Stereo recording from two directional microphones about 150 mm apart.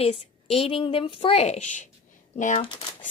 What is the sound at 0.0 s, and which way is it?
A woman's voice, 40° left (ahead or behind).